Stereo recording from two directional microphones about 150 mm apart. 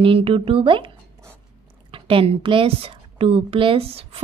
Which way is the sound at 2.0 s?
35° right (ahead or behind).